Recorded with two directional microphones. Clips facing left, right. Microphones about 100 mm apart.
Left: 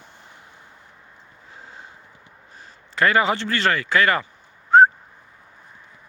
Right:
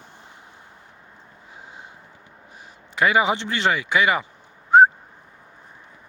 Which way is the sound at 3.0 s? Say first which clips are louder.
Even; 15° right (ahead or behind).